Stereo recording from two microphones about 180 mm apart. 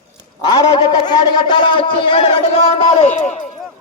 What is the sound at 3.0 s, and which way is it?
Speech, 40° left (ahead or behind).